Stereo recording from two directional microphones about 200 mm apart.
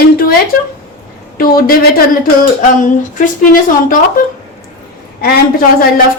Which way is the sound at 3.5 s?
45° left (ahead or behind).